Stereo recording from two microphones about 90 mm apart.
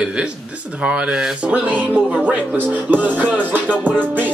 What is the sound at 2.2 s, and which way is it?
Music, 20° right (ahead or behind).